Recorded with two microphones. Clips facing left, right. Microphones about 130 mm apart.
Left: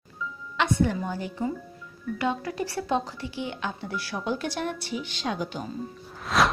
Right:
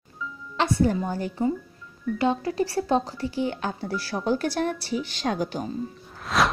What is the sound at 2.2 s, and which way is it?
Speech, 30° right (ahead or behind).